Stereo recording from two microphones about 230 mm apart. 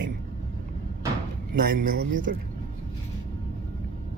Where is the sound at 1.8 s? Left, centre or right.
Right.